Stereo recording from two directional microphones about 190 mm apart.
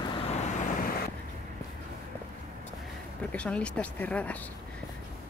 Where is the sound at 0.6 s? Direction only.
45° left (ahead or behind).